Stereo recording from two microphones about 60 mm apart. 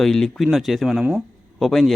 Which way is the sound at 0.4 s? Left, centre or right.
Centre.